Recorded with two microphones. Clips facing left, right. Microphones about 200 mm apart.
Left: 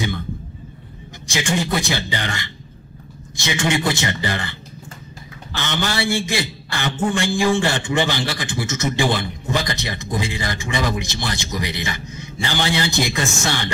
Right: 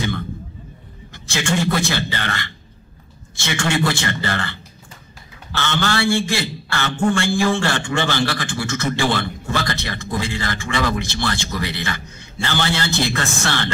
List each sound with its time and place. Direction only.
1.2 s a man's voice: 15° left (ahead or behind)